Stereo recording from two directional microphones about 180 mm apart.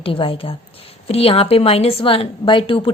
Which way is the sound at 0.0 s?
30° left (ahead or behind).